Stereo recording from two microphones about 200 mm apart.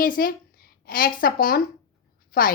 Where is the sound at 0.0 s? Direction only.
45° left (ahead or behind).